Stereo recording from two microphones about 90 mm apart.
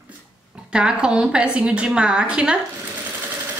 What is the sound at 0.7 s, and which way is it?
A woman's voice, 10° right (ahead or behind).